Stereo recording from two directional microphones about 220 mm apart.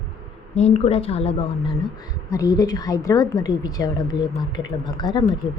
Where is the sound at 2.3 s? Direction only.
15° left (ahead or behind).